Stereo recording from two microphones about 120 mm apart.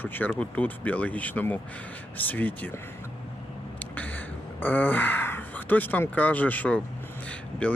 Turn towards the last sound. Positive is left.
turn(degrees=10)  # may be behind; listen again after turning